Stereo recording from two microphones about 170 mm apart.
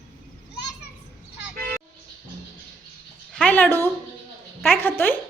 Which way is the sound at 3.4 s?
10° left (ahead or behind).